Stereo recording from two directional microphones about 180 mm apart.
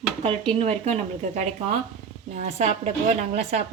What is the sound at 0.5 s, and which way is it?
A woman's voice, 40° right (ahead or behind).